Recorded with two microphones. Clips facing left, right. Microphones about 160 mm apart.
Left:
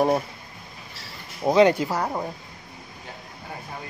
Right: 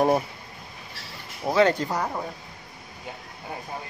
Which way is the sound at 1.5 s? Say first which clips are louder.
Left 3 dB; 15° left (ahead or behind).